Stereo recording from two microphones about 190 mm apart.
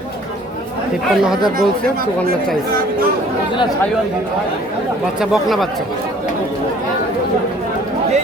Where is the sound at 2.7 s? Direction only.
50° right (ahead or behind).